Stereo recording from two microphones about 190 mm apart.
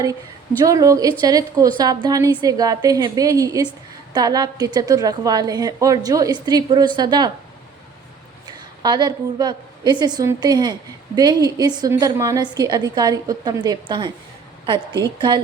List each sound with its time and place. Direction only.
0.6 s a woman's voice: 15° right (ahead or behind)
8.4 s a woman's voice: 20° right (ahead or behind)